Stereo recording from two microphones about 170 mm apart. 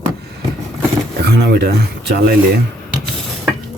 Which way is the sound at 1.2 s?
75° right (ahead or behind).